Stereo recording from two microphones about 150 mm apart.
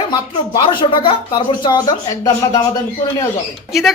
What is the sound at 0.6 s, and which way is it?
Speech, 35° left (ahead or behind).